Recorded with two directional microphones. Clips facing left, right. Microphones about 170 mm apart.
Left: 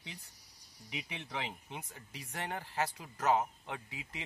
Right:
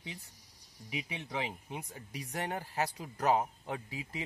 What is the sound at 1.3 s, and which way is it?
Speech, 10° right (ahead or behind).